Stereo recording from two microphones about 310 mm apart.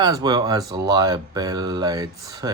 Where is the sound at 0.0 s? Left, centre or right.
Centre.